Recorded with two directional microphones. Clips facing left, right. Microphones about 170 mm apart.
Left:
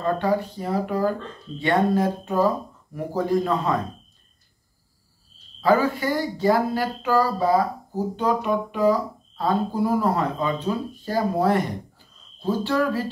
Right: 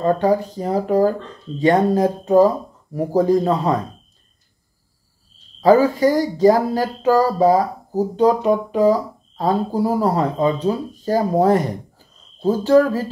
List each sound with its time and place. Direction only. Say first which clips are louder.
0.0 s speech: right 6 dB; 40° right (ahead or behind)
5.6 s speech: right 7 dB; 40° right (ahead or behind)